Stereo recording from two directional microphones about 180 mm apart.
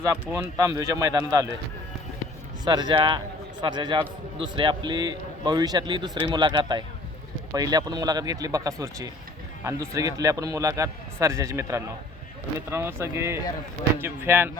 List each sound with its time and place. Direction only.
0.5 s a man's voice: 15° right (ahead or behind)
2.6 s a man's voice: 25° right (ahead or behind)